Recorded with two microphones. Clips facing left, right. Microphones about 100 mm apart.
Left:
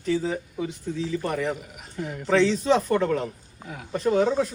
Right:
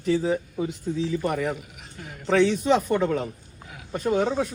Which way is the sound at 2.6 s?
10° right (ahead or behind).